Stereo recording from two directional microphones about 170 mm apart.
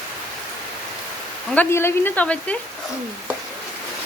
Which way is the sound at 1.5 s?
15° left (ahead or behind).